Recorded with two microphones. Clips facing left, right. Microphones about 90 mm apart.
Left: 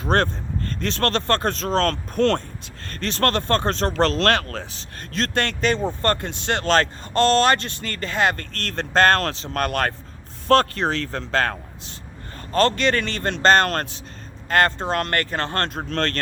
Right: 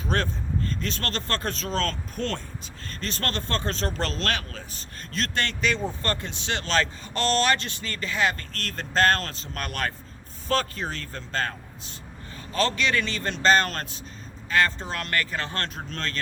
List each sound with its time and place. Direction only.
0.0 s speech: 55° left (ahead or behind)
5.1 s speech: 50° left (ahead or behind)
12.5 s speech: 50° left (ahead or behind)